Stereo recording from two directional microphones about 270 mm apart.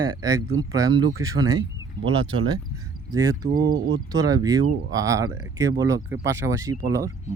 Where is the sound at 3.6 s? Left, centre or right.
Right.